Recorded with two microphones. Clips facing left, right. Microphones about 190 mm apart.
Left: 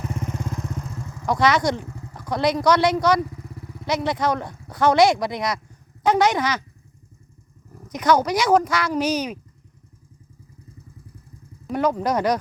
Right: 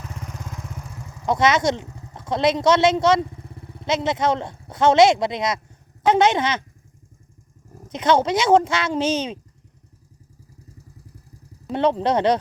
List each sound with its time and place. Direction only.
0.3 s speech: centre (ahead or behind); by 6.7 s 25° right (ahead or behind)
7.9 s speech: 25° right (ahead or behind)
11.7 s speech: 25° right (ahead or behind)